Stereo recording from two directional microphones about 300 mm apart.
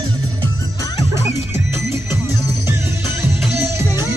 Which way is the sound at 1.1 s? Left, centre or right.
Centre.